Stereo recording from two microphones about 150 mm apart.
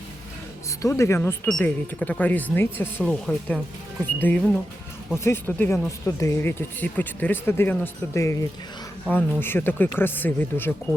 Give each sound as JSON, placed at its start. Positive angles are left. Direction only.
{"t": 0.8, "sound": "speech", "side_deg": 20}